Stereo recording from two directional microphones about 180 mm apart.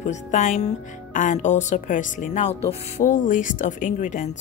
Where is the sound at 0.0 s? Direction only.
40° left (ahead or behind).